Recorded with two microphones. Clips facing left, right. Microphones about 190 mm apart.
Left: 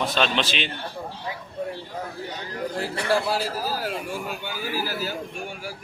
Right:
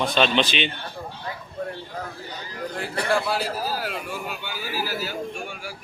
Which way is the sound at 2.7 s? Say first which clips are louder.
Even; 35° left (ahead or behind).